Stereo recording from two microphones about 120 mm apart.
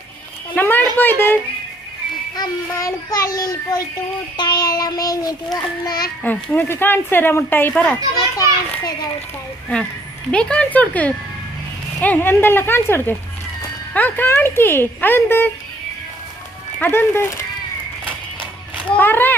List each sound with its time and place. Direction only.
0.5 s a woman's voice: 15° left (ahead or behind)
2.3 s a child's voice: 30° left (ahead or behind)
6.2 s a woman's voice: 15° left (ahead or behind)
8.1 s a child's voice: 30° left (ahead or behind)
10.3 s a woman's voice: 10° left (ahead or behind)
16.8 s a woman's voice: 15° left (ahead or behind)
18.9 s speech: 15° left (ahead or behind)